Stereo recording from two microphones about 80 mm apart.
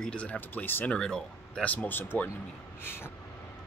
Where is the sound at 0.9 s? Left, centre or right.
Centre; by 3.1 s left.